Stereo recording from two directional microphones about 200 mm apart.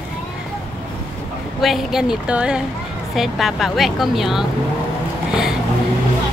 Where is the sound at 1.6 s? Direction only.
Centre (ahead or behind).